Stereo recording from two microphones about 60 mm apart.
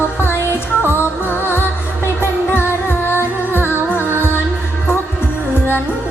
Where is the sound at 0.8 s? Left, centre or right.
Left.